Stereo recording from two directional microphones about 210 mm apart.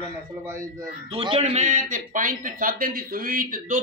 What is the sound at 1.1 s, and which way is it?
A man's voice, 25° right (ahead or behind).